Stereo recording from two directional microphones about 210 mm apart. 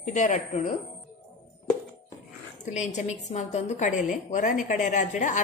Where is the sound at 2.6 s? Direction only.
35° left (ahead or behind).